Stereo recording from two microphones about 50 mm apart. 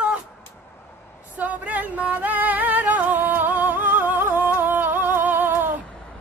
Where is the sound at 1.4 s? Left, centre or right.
Right.